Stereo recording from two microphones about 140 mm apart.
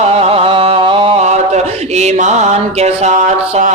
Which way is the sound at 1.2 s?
55° right (ahead or behind).